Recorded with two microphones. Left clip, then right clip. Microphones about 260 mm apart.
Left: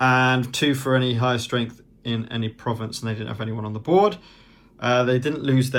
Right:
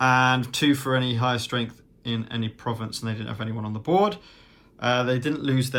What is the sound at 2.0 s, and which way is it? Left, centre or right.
Speech, centre.